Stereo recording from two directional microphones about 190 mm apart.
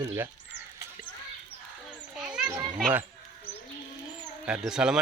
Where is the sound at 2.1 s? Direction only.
5° right (ahead or behind).